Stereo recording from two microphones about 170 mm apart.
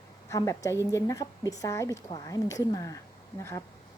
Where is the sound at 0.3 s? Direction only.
20° left (ahead or behind).